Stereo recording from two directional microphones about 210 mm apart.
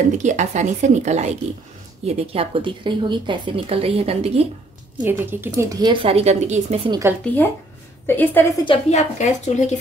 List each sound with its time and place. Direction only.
0.2 s a woman's voice: 35° right (ahead or behind)
5.0 s speech: 10° right (ahead or behind); by 6.8 s 30° right (ahead or behind)
6.9 s speech: 15° right (ahead or behind)
8.1 s a woman's voice: 10° left (ahead or behind)
8.6 s speech: 35° left (ahead or behind)